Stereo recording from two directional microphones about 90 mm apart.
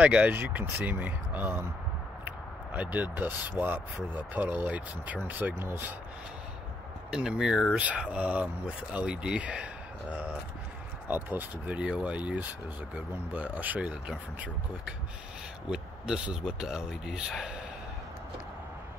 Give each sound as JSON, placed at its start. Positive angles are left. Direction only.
{"t": 0.0, "sound": "speech", "side_deg": -15}
{"t": 7.1, "sound": "speech", "side_deg": -5}